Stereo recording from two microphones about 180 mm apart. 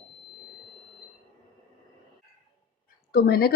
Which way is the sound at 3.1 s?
60° left (ahead or behind).